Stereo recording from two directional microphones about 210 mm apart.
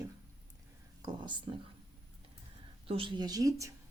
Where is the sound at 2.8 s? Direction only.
25° right (ahead or behind).